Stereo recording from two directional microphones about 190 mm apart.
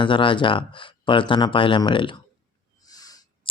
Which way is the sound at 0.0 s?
25° left (ahead or behind).